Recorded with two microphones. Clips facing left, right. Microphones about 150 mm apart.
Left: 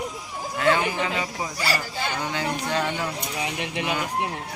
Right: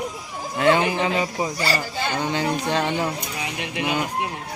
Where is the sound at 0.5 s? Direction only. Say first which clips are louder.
Right 4 dB; 20° right (ahead or behind).